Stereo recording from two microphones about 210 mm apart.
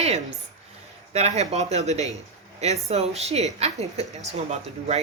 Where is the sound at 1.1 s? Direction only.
30° right (ahead or behind).